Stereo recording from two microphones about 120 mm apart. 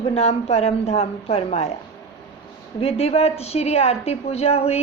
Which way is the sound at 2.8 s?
55° left (ahead or behind).